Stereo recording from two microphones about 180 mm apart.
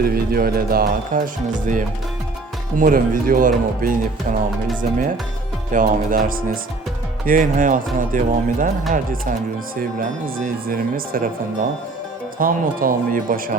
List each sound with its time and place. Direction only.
0.0 s speech: 55° right (ahead or behind)
9.7 s speech: 50° right (ahead or behind)